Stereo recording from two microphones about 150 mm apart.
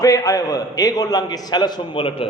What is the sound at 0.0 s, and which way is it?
A man's voice, 25° left (ahead or behind).